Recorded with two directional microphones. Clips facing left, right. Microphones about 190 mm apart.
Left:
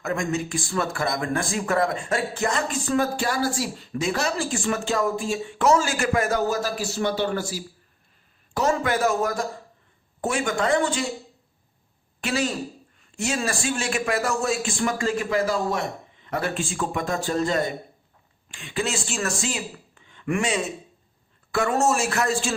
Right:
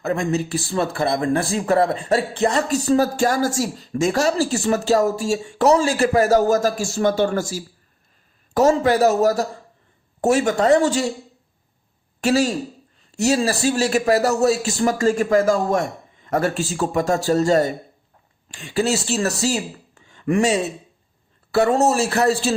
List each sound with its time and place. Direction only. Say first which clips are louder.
0.0 s speech: right 4 dB; 35° right (ahead or behind)
8.7 s speech: right 6 dB; 35° right (ahead or behind)
12.2 s speech: right 7 dB; 40° right (ahead or behind)